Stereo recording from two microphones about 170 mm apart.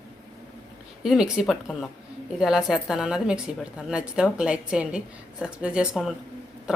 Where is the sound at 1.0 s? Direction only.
5° right (ahead or behind).